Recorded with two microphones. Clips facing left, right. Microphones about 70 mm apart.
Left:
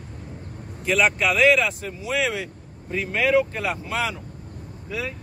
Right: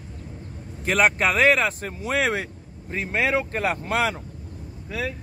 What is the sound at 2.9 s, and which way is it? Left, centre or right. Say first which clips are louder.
Speech: left 3 dB; right.